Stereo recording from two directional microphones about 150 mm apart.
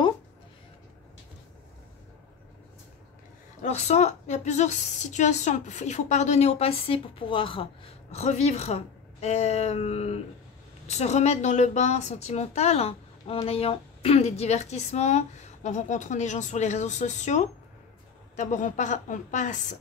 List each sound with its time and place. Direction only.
3.6 s a woman's voice: 45° left (ahead or behind)